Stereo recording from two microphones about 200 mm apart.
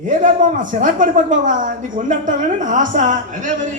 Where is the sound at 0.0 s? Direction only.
40° right (ahead or behind).